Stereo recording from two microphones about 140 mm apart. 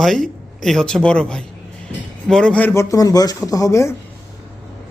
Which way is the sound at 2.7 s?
20° left (ahead or behind).